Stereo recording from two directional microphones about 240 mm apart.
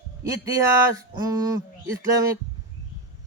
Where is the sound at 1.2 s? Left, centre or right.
Centre.